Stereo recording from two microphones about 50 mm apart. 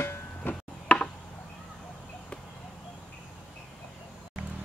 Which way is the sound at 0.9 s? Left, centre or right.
Left.